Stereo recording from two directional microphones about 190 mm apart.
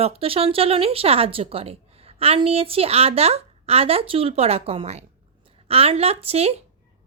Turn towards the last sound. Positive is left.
turn(degrees=-30)  # may be behind; listen again after turning